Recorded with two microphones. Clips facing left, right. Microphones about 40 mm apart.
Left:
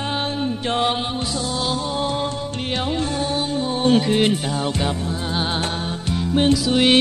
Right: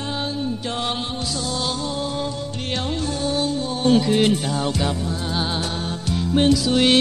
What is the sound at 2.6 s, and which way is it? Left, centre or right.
Music, centre.